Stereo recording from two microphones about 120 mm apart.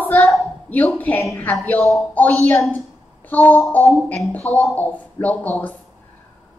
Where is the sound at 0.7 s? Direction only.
15° left (ahead or behind).